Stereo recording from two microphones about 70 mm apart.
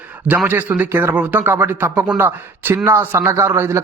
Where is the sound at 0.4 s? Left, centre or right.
Right.